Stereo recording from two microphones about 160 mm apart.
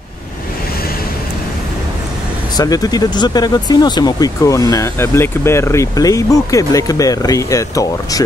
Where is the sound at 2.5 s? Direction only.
25° left (ahead or behind).